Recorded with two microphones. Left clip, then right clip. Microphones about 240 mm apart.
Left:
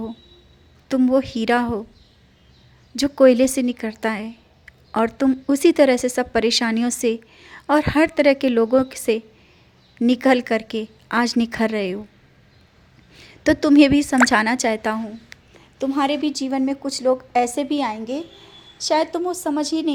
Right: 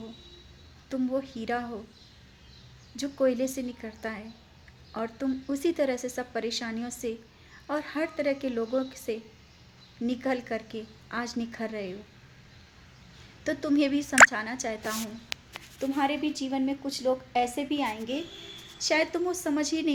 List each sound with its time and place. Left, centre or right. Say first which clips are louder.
0.9 s a woman's voice: left 12 dB; left
2.9 s a woman's voice: left 13 dB; left
13.4 s a woman's voice: left 13 dB; left